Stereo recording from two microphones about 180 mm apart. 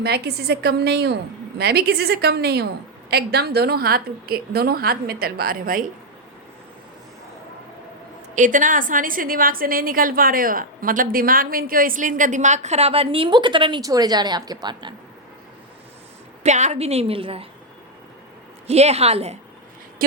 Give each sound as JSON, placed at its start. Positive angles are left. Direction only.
{"t": 0.0, "sound": "a woman's voice", "side_deg": -65}
{"t": 8.4, "sound": "a woman's voice", "side_deg": -45}
{"t": 16.4, "sound": "a woman's voice", "side_deg": -40}
{"t": 18.7, "sound": "a woman's voice", "side_deg": -35}
{"t": 20.0, "sound": "a woman's voice", "side_deg": -55}